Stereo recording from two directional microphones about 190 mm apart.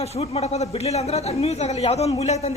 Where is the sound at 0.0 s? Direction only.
30° left (ahead or behind).